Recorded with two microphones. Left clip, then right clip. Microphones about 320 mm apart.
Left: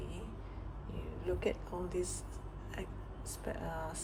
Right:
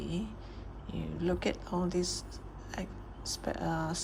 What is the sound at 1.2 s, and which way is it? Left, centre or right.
Speech, right.